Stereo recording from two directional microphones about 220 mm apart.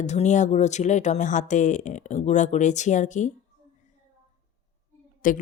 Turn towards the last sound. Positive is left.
turn(degrees=35)  # may be behind; listen again after turning